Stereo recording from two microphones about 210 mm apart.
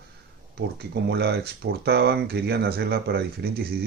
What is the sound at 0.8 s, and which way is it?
Speech, 50° right (ahead or behind).